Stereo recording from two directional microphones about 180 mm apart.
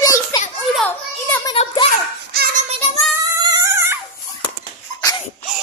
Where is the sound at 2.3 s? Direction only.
55° right (ahead or behind).